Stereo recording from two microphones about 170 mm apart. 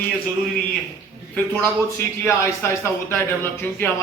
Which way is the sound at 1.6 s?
15° left (ahead or behind).